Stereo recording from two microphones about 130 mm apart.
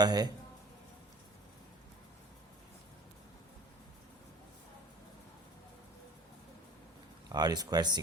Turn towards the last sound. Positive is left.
turn(degrees=-30)  # may be behind; listen again after turning